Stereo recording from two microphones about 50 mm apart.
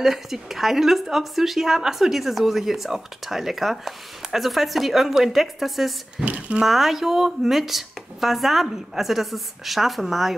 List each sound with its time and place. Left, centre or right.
0.0 s speech: centre
6.2 s a sound: right
6.6 s speech: centre